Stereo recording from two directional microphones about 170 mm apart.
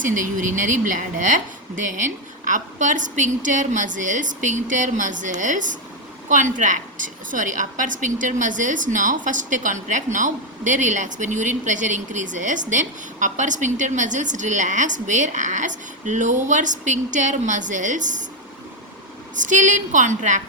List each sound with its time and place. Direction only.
0.0 s a woman's voice: 50° right (ahead or behind)
19.4 s a woman's voice: 45° right (ahead or behind)